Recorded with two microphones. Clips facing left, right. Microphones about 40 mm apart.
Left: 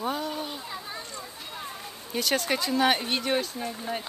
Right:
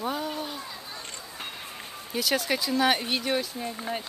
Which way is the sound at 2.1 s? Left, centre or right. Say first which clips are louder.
Even; centre.